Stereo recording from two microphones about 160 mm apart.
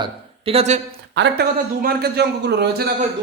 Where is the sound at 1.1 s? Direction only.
90° right.